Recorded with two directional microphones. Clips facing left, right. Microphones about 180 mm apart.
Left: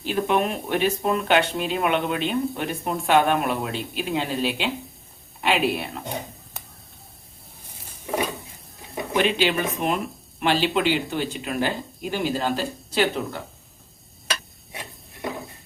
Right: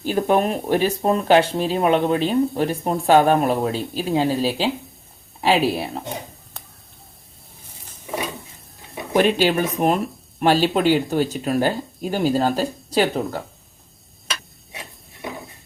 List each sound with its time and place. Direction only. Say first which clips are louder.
0.0 s speech: right 4 dB; 40° right (ahead or behind)
9.1 s speech: right 5 dB; 45° right (ahead or behind)